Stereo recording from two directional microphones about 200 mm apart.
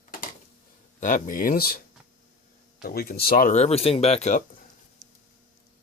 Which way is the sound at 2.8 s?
50° left (ahead or behind).